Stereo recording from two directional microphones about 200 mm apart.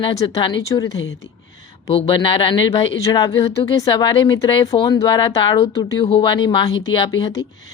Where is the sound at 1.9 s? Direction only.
25° left (ahead or behind).